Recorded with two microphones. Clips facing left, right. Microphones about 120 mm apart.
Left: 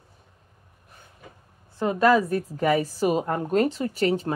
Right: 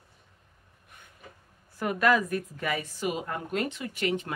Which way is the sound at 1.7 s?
25° left (ahead or behind).